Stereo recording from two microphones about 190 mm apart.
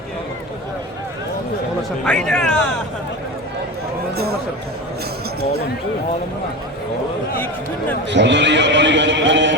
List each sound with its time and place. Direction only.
2.0 s speech: 5° left (ahead or behind)
4.1 s a sound: 55° right (ahead or behind)
7.3 s speech: 10° left (ahead or behind)
8.1 s speech: 70° right (ahead or behind)